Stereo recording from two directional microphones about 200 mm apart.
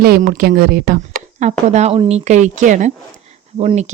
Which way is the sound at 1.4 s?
35° right (ahead or behind).